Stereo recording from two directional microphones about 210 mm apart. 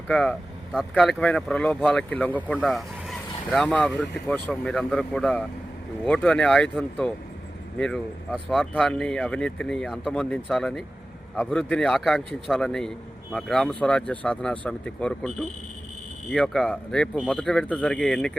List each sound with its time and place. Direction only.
0.1 s speech: 5° left (ahead or behind)